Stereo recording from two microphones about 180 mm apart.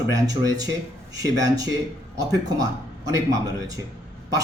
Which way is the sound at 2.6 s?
20° right (ahead or behind).